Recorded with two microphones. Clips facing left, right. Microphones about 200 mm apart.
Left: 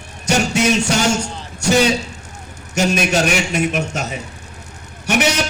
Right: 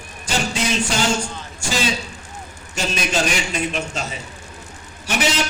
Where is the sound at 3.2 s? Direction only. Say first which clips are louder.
Left 5 dB; 65° left (ahead or behind).